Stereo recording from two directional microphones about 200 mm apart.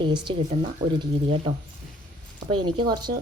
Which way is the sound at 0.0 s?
25° right (ahead or behind).